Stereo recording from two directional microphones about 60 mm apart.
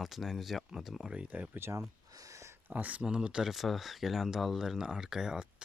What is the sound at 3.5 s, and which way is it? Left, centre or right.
Speech, centre.